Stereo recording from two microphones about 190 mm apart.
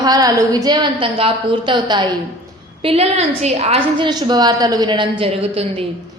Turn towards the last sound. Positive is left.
turn(degrees=-30)  # may be behind; listen again after turning